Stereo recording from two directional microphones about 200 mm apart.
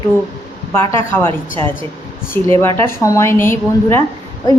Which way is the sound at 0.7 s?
15° left (ahead or behind).